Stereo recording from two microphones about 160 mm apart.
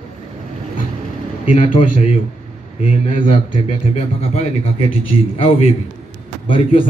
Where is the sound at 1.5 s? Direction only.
40° left (ahead or behind).